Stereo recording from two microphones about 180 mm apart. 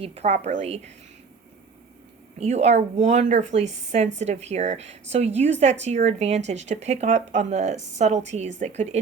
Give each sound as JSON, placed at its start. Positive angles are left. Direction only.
{"t": 0.0, "sound": "speech", "side_deg": -35}
{"t": 2.4, "sound": "speech", "side_deg": -35}